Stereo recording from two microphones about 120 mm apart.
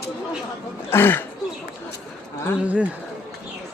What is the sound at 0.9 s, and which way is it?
Speech, 20° left (ahead or behind).